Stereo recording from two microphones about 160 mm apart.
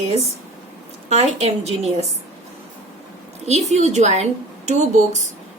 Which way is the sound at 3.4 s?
45° right (ahead or behind).